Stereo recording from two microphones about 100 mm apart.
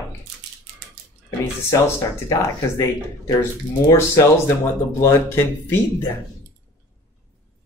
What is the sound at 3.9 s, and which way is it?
Speech, 25° left (ahead or behind).